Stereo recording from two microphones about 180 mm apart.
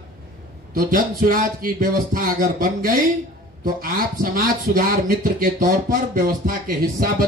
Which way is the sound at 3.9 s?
55° right (ahead or behind).